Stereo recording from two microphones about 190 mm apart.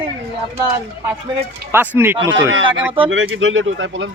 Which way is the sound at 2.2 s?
80° right.